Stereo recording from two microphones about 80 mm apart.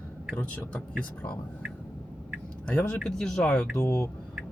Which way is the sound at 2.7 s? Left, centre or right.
Centre.